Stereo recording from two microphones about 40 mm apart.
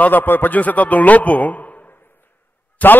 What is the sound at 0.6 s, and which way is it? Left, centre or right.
A man's voice, left.